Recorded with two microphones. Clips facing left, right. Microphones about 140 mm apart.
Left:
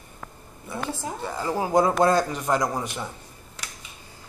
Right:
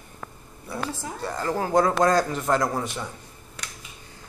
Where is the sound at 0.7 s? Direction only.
Centre (ahead or behind).